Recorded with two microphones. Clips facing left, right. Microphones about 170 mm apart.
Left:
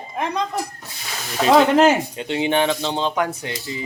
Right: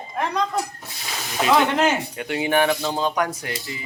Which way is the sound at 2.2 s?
25° left (ahead or behind).